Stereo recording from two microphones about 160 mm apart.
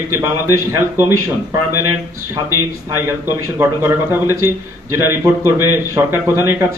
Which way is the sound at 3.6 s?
15° right (ahead or behind).